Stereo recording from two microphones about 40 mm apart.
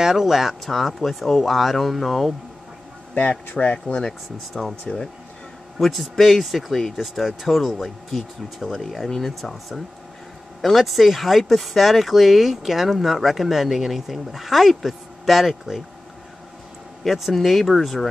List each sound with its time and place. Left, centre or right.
0.0 s speech: centre
3.2 s speech: left
4.6 s speech: centre
5.8 s speech: centre
17.0 s speech: centre